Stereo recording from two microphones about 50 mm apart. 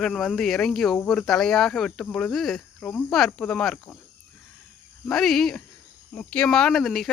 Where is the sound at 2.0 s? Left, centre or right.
Left.